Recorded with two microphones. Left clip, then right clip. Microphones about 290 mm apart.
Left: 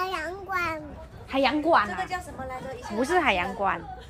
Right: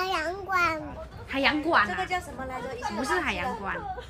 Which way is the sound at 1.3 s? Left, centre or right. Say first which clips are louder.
Left 2 dB; centre.